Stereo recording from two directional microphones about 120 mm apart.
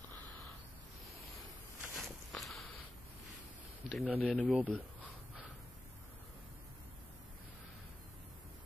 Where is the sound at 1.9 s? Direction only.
Centre (ahead or behind).